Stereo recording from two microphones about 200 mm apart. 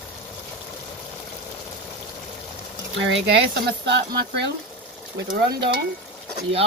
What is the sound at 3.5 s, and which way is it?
Speech, 55° right (ahead or behind).